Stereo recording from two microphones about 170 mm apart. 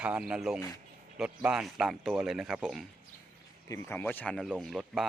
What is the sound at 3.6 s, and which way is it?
Speech, 15° left (ahead or behind).